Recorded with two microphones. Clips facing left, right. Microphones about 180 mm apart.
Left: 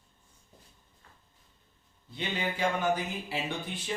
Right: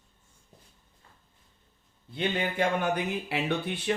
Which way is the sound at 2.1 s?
55° right (ahead or behind).